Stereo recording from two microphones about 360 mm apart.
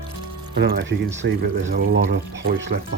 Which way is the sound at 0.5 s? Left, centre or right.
Right.